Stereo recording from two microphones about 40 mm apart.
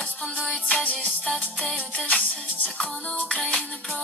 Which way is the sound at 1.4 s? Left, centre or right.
Left.